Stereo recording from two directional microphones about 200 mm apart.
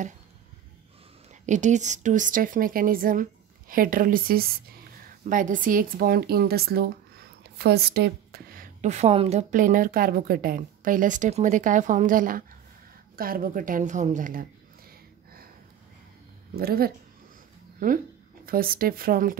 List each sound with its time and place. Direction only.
1.4 s speech: 35° right (ahead or behind); by 8.6 s 50° right (ahead or behind)
8.8 s a woman's voice: 30° right (ahead or behind)
16.5 s speech: 50° right (ahead or behind)